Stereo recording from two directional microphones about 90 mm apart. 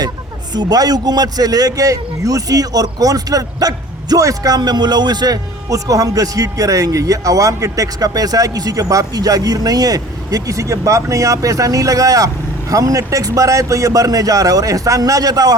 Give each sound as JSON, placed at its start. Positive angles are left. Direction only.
{"t": 0.5, "sound": "a man's voice", "side_deg": -50}